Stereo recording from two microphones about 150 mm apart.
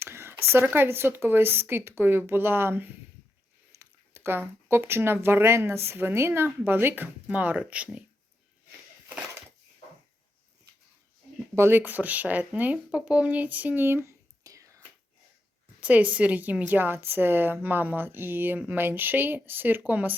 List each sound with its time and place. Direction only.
0.0 s a sound: 15° right (ahead or behind)
0.5 s a woman's voice: 15° right (ahead or behind)
11.5 s speech: 15° right (ahead or behind)
15.8 s a woman's voice: 10° right (ahead or behind)